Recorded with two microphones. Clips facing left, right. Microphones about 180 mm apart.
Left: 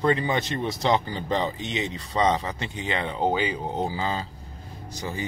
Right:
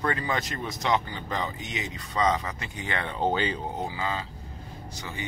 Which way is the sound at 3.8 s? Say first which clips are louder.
Left 4 dB; 30° left (ahead or behind).